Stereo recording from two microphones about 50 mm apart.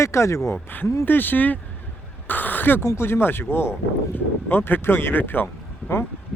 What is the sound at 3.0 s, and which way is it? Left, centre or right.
Speech, left.